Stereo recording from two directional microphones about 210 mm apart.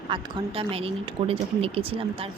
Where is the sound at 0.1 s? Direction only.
25° right (ahead or behind).